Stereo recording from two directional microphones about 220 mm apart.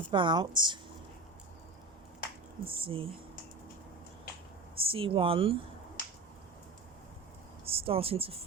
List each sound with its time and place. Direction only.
0.1 s speech: 20° right (ahead or behind)
2.6 s speech: 25° right (ahead or behind)
4.8 s speech: 25° right (ahead or behind)
7.6 s speech: 25° right (ahead or behind)